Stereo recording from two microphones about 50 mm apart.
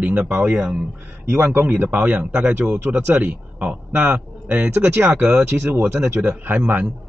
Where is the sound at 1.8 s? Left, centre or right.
Right.